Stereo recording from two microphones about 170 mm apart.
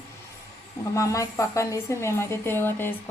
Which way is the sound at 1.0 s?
20° left (ahead or behind).